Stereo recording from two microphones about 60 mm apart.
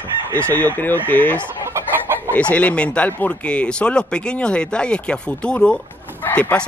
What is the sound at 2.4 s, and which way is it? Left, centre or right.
Speech, left.